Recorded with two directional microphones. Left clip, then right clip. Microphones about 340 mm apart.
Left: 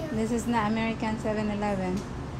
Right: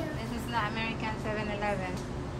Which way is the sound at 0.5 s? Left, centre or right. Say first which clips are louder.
Left 1 dB; centre.